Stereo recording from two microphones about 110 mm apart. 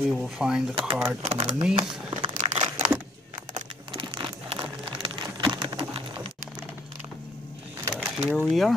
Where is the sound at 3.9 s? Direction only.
50° right (ahead or behind).